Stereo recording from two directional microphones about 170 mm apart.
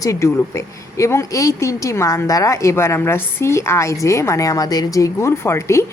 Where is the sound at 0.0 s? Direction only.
15° left (ahead or behind).